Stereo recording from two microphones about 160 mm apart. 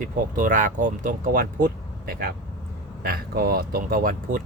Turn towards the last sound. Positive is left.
turn(degrees=-65)  # may be behind; listen again after turning